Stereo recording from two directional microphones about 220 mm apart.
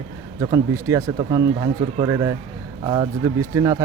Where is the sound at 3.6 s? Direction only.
15° right (ahead or behind).